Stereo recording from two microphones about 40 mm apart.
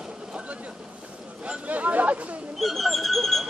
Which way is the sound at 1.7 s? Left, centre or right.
Right.